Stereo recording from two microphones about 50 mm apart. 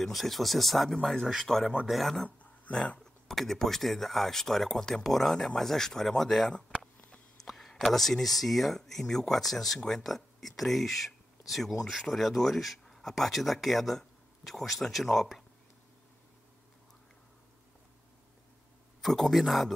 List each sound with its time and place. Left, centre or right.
0.0 s speech: centre
2.7 s speech: centre
3.3 s speech: centre
18.9 s speech: centre